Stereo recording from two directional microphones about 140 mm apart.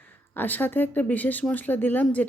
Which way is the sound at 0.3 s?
10° left (ahead or behind).